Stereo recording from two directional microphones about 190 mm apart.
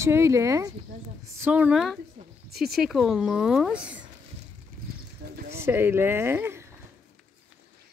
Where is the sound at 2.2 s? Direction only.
35° right (ahead or behind).